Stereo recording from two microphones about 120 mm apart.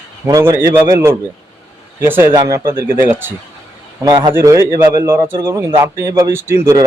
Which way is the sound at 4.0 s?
35° right (ahead or behind).